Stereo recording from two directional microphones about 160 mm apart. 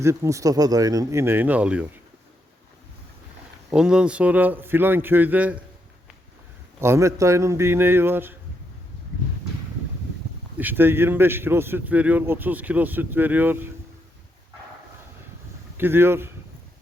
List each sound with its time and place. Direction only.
0.0 s a man's voice: 20° right (ahead or behind)
3.7 s a man's voice: 5° right (ahead or behind)
6.7 s a man's voice: 15° right (ahead or behind)
10.6 s a man's voice: 10° right (ahead or behind)
15.8 s a man's voice: 15° right (ahead or behind)